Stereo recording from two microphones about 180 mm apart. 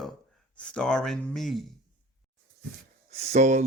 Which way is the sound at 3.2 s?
40° right (ahead or behind).